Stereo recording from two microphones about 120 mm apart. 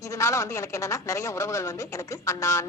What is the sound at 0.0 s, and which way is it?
A man's voice, 25° left (ahead or behind).